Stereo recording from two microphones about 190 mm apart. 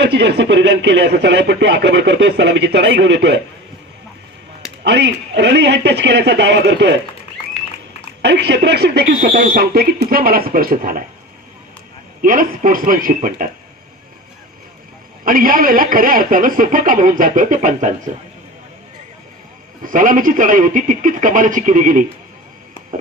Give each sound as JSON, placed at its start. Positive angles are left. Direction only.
{"t": 0.0, "sound": "a man's voice", "side_deg": -65}
{"t": 4.8, "sound": "a man's voice", "side_deg": -65}
{"t": 8.2, "sound": "a man's voice", "side_deg": -65}
{"t": 12.2, "sound": "speech", "side_deg": -45}
{"t": 15.2, "sound": "speech", "side_deg": -50}
{"t": 19.8, "sound": "speech", "side_deg": -45}